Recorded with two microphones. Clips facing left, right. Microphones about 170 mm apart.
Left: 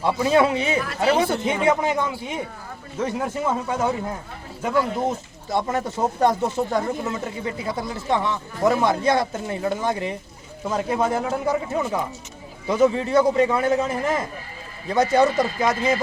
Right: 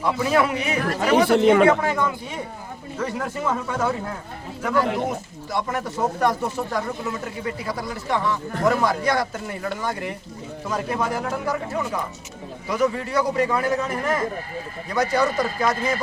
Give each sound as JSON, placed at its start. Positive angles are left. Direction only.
{"t": 0.0, "sound": "speech", "side_deg": 25}
{"t": 1.2, "sound": "speech", "side_deg": -75}
{"t": 1.6, "sound": "speech", "side_deg": 20}
{"t": 3.0, "sound": "speech", "side_deg": 20}
{"t": 5.5, "sound": "speech", "side_deg": 25}